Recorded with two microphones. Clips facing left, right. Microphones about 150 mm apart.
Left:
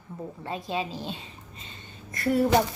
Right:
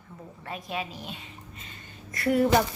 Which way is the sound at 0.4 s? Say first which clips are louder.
Left 3 dB; 25° left (ahead or behind).